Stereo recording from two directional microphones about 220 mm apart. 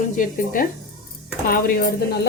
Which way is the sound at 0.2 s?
40° left (ahead or behind).